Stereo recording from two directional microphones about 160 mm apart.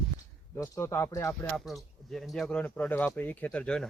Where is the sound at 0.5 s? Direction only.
15° left (ahead or behind).